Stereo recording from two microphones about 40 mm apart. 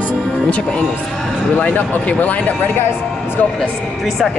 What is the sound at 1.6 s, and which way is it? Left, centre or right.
Speech, left.